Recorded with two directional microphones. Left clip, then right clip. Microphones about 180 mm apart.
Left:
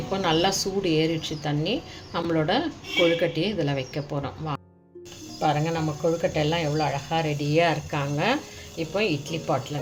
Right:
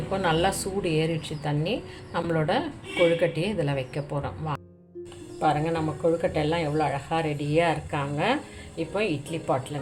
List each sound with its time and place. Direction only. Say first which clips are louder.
0.1 s a woman's voice: left 1 dB; 10° left (ahead or behind)